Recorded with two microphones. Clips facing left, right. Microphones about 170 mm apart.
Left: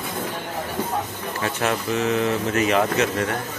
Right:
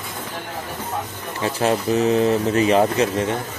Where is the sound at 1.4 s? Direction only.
30° right (ahead or behind).